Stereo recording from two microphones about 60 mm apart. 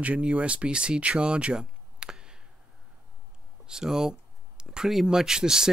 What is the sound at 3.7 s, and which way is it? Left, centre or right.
Speech, centre.